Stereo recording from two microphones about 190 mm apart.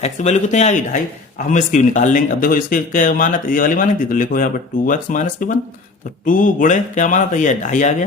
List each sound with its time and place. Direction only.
0.0 s speech: 40° left (ahead or behind)